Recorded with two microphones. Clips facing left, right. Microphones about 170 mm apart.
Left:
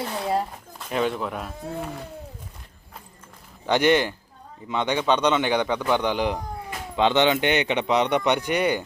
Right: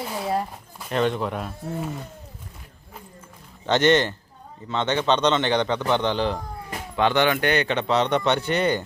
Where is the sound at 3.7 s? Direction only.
10° left (ahead or behind).